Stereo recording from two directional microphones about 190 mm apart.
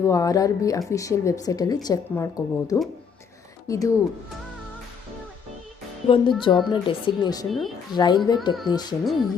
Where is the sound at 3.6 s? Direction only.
15° left (ahead or behind).